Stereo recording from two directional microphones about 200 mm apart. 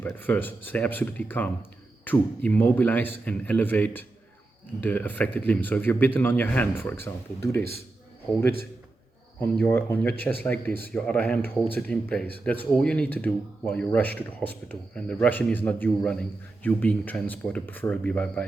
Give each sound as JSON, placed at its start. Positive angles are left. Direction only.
{"t": 0.0, "sound": "speech", "side_deg": 10}
{"t": 9.4, "sound": "speech", "side_deg": 10}